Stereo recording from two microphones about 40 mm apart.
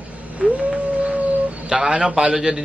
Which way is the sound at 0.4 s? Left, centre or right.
Right.